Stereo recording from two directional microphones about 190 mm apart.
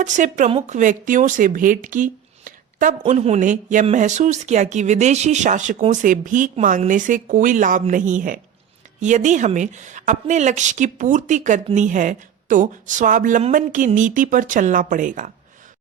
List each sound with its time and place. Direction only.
0.0 s a woman's voice: 40° right (ahead or behind)